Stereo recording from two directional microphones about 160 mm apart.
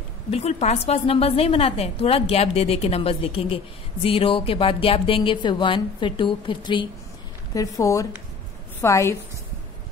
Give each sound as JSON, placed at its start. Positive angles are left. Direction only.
{"t": 0.3, "sound": "a woman's voice", "side_deg": 40}